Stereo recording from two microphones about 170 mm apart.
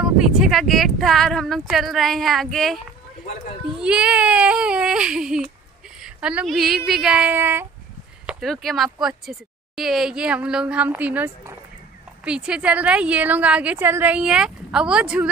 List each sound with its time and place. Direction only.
0.0 s speech: 5° right (ahead or behind)
3.8 s speech: 5° right (ahead or behind)
5.9 s a sound: 5° right (ahead or behind)
6.9 s a woman's voice: 5° right (ahead or behind)
8.3 s a woman's voice: centre (ahead or behind)